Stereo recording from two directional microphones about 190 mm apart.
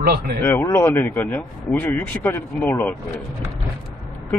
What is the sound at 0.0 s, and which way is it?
Speech, 55° right (ahead or behind).